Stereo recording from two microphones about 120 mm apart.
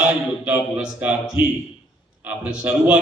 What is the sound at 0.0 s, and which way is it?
A man's voice, 10° right (ahead or behind).